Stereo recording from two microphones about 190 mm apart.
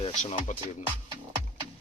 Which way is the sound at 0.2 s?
40° left (ahead or behind).